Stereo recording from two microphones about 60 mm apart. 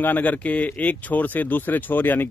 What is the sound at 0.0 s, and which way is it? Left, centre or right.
Speech, left.